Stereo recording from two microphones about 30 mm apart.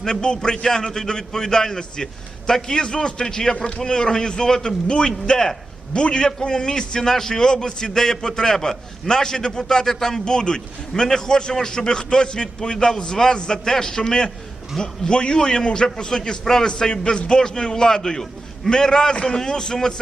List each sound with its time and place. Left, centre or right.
0.0 s a man's voice: left
15.1 s a man's voice: left